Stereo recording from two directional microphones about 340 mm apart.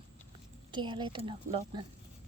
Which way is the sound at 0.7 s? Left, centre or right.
Centre.